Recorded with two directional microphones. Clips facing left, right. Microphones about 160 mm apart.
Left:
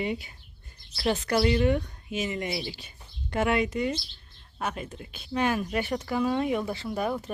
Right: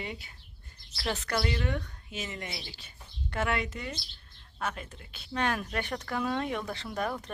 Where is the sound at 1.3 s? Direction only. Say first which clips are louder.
Left 9 dB; 20° left (ahead or behind).